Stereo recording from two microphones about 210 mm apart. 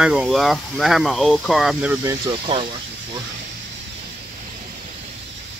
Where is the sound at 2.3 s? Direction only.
25° right (ahead or behind).